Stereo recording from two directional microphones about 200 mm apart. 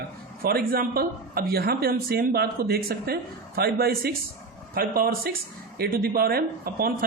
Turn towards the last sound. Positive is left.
turn(degrees=-45)  # may be behind; listen again after turning